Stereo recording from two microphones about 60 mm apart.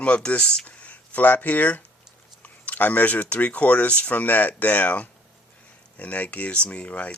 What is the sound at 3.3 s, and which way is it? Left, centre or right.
Speech, left.